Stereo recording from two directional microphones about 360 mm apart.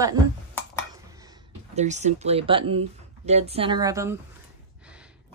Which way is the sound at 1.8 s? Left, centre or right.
Centre.